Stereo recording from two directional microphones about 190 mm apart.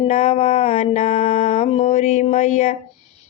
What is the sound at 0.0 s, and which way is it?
Mantra, 35° left (ahead or behind).